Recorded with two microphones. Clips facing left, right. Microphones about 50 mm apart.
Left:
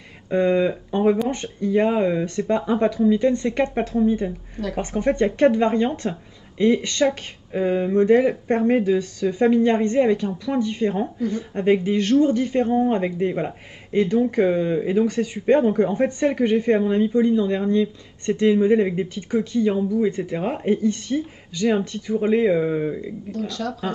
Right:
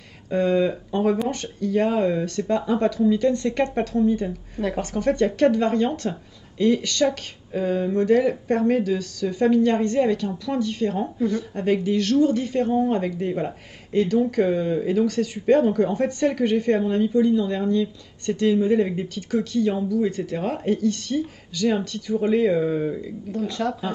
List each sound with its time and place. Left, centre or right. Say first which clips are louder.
0.3 s speech: left 2 dB; left
23.3 s speech: right 3 dB; right